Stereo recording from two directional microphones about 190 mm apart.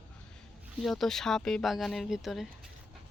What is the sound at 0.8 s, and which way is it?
Speech, centre (ahead or behind).